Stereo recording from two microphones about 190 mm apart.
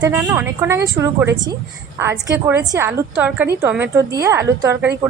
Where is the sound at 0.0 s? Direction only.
10° right (ahead or behind).